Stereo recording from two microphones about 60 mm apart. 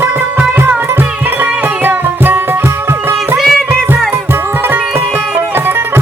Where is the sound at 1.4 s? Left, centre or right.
Right.